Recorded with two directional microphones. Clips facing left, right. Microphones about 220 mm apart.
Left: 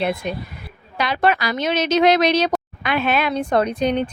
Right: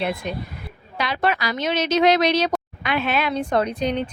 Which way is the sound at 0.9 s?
50° left (ahead or behind).